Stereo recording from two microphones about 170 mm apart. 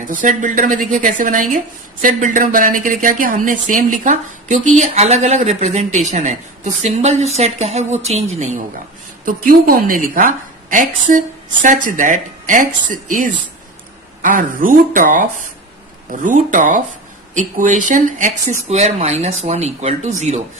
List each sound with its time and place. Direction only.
0.0 s a woman's voice: 50° right (ahead or behind)
9.2 s a woman's voice: 55° right (ahead or behind)